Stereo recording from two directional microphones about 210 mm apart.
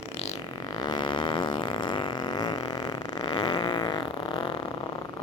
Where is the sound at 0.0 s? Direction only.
30° left (ahead or behind).